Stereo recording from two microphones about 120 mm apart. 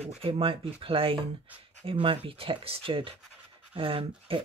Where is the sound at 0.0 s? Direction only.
50° right (ahead or behind).